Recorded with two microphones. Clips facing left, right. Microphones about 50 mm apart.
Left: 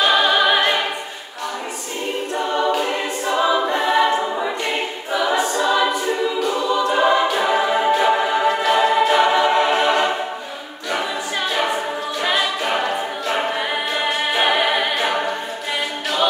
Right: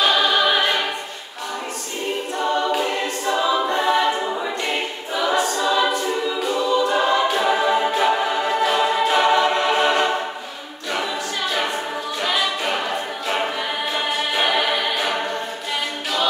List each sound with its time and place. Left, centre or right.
0.0 s music: centre
2.8 s a capella: centre
5.1 s choir: centre
6.9 s music: centre
12.2 s choir: centre
13.9 s a capella: centre